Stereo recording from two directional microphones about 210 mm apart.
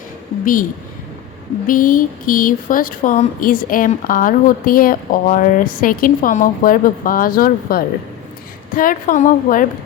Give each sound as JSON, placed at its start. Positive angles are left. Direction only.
{"t": 1.6, "sound": "speech", "side_deg": 40}